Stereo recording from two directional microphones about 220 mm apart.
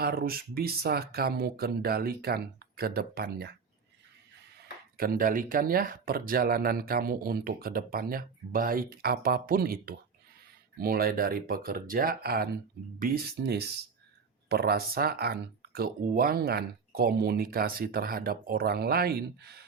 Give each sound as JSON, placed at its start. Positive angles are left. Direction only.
{"t": 0.0, "sound": "speech", "side_deg": -45}
{"t": 4.9, "sound": "speech", "side_deg": -40}